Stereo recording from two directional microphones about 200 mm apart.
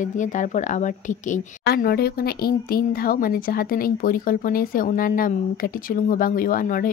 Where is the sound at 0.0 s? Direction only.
40° left (ahead or behind).